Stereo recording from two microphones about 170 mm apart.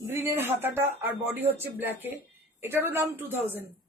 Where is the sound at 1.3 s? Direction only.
10° right (ahead or behind).